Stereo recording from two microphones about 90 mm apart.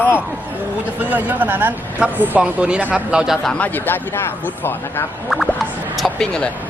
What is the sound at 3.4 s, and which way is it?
Speech, 10° left (ahead or behind).